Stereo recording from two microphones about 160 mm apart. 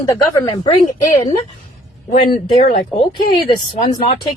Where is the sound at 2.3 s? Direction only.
35° left (ahead or behind).